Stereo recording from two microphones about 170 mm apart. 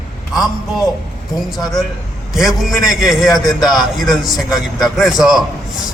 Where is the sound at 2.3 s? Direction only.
Centre (ahead or behind).